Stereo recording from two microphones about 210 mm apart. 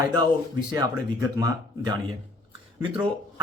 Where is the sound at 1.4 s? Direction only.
20° right (ahead or behind).